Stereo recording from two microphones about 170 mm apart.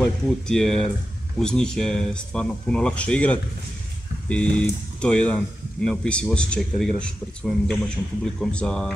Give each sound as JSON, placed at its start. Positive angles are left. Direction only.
{"t": 0.0, "sound": "speech", "side_deg": 5}